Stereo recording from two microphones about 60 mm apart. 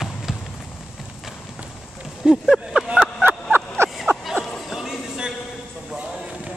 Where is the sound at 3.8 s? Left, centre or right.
Right.